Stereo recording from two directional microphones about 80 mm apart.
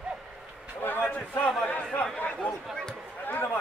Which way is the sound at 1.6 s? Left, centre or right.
Centre.